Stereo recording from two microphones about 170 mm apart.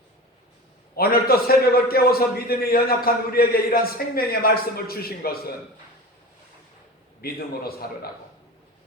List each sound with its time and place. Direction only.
0.9 s a man's voice: 60° left (ahead or behind)
7.2 s a man's voice: 65° left (ahead or behind)